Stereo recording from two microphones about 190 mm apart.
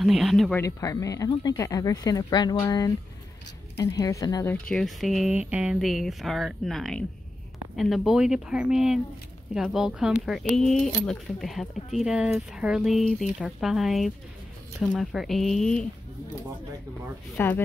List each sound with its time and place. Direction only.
0.0 s speech: centre (ahead or behind)
0.6 s speech: 15° left (ahead or behind)
4.6 s speech: centre (ahead or behind)
17.4 s speech: 10° left (ahead or behind)